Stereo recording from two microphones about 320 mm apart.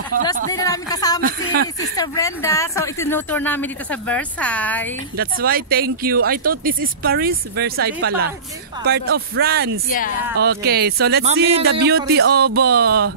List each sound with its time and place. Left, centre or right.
0.5 s a woman's voice: centre
5.1 s speech: right
9.8 s speech: left
10.4 s speech: right